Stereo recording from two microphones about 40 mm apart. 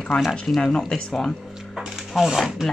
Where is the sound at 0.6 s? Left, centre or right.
Centre.